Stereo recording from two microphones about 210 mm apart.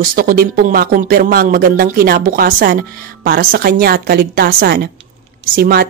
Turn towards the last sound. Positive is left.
turn(degrees=-45)  # may be behind; listen again after turning